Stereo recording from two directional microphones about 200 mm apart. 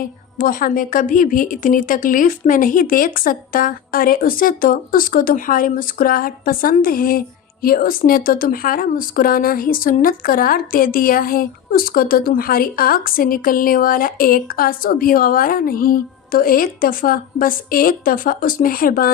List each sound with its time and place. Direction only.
0.0 s a woman's voice: 45° left (ahead or behind)